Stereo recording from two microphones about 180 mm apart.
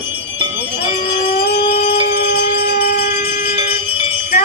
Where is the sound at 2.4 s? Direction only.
60° left (ahead or behind).